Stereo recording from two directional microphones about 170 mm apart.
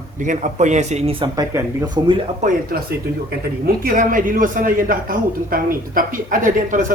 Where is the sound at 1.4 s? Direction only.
20° right (ahead or behind).